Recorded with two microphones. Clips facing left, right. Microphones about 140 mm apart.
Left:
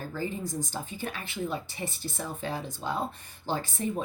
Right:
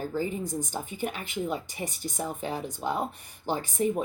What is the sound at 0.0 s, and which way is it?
A woman's voice, 15° right (ahead or behind).